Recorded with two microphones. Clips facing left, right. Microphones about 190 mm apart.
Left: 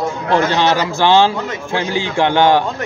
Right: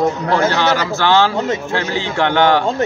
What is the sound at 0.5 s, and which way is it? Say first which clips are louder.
Speech: left 1 dB; 20° left (ahead or behind).